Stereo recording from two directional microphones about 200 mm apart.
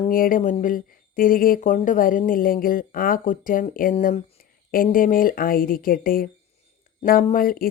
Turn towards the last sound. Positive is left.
turn(degrees=45)  # may be behind; listen again after turning